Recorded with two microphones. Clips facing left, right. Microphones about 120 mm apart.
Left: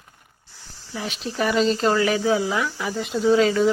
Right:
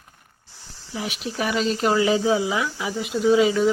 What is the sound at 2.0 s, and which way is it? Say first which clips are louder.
Speech: right 1 dB; 20° right (ahead or behind).